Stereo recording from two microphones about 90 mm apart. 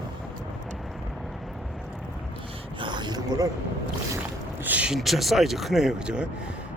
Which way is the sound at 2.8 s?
60° right (ahead or behind).